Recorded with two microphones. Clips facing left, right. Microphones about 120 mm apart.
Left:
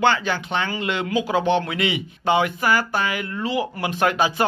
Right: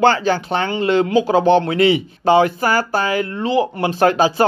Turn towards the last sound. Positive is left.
turn(degrees=-35)  # may be behind; listen again after turning